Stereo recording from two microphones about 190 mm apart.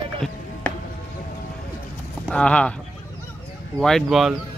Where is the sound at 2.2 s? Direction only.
5° left (ahead or behind).